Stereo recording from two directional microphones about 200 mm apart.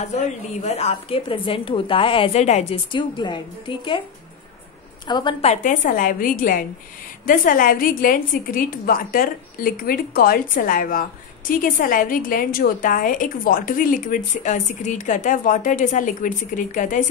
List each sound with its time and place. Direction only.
0.0 s a woman's voice: 35° left (ahead or behind)
5.0 s a woman's voice: 25° left (ahead or behind); by 17.0 s 40° left (ahead or behind)